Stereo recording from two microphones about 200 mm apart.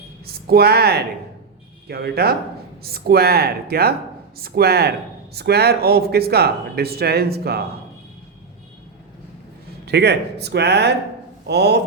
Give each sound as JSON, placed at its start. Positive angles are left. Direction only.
{"t": 0.4, "sound": "speech", "side_deg": -50}
{"t": 9.8, "sound": "speech", "side_deg": -55}